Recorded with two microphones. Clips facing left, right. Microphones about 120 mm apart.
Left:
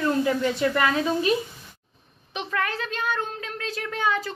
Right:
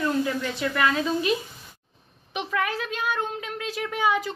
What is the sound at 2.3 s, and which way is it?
A woman's voice, 10° right (ahead or behind).